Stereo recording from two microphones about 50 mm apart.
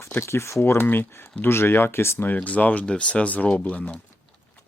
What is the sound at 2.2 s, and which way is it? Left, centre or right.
Speech, left.